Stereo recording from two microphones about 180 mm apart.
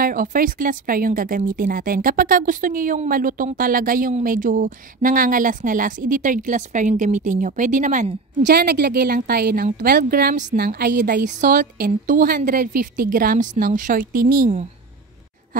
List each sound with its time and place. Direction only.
0.0 s speech: 50° right (ahead or behind)
8.4 s a woman's voice: 65° right (ahead or behind)
10.6 s a woman's voice: 65° right (ahead or behind)
11.2 s speech: 50° right (ahead or behind)